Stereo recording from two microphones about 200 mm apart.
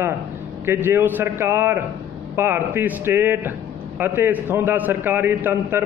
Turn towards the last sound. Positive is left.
turn(degrees=-10)  # may be behind; listen again after turning